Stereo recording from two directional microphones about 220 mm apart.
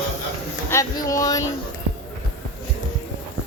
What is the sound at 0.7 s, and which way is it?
Speech, 15° left (ahead or behind).